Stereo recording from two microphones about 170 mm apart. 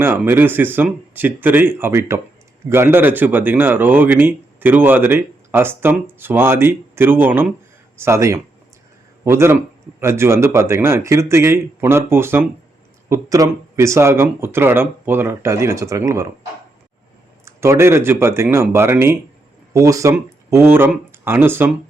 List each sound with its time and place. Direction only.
0.0 s speech: 10° right (ahead or behind)
17.4 s speech: 15° right (ahead or behind)